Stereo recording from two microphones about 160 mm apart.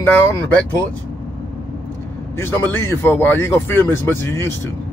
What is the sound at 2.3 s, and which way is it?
Speech, 15° left (ahead or behind).